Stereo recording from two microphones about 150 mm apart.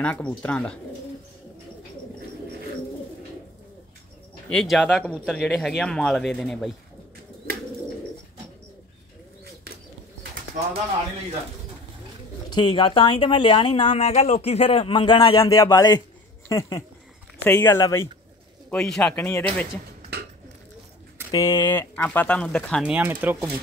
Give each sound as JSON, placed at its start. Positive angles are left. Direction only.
{"t": 0.0, "sound": "speech", "side_deg": 10}
{"t": 4.5, "sound": "speech", "side_deg": 0}
{"t": 12.4, "sound": "speech", "side_deg": 30}
{"t": 15.4, "sound": "speech", "side_deg": 20}
{"t": 18.7, "sound": "speech", "side_deg": 5}
{"t": 21.3, "sound": "speech", "side_deg": 20}
{"t": 22.8, "sound": "speech", "side_deg": -10}